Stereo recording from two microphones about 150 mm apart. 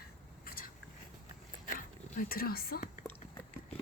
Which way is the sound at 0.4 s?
75° left (ahead or behind).